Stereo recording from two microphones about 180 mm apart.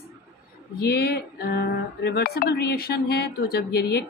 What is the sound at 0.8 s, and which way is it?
A woman's voice, 65° left (ahead or behind).